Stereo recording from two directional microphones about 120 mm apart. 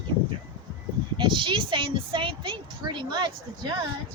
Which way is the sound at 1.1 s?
45° right (ahead or behind).